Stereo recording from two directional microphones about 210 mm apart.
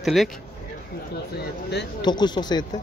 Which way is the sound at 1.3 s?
55° left (ahead or behind).